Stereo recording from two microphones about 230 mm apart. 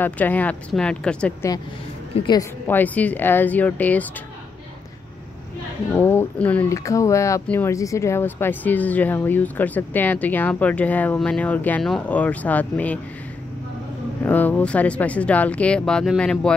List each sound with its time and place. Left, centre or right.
0.0 s speech: centre
2.1 s a woman's voice: centre
2.7 s speech: centre
5.9 s speech: centre
14.2 s speech: centre